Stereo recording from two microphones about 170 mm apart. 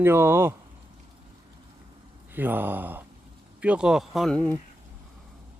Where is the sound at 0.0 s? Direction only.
15° right (ahead or behind).